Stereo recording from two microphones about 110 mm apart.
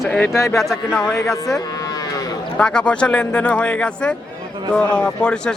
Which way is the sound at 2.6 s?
10° left (ahead or behind).